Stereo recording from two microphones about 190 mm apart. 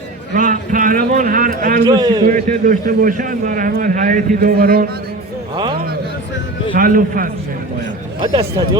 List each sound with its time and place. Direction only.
0.3 s a man's voice: 45° right (ahead or behind)
1.9 s speech: 20° right (ahead or behind)
2.2 s a man's voice: 45° right (ahead or behind)
6.7 s a man's voice: 45° right (ahead or behind)
8.2 s speech: 25° right (ahead or behind)